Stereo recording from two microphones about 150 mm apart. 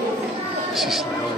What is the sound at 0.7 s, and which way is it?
Vehicle, centre (ahead or behind).